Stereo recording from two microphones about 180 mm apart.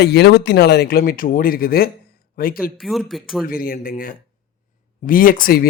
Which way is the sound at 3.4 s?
55° left (ahead or behind).